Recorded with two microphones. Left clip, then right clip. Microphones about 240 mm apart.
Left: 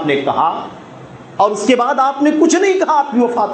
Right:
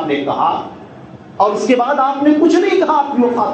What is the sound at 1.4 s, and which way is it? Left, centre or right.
A man's voice, left.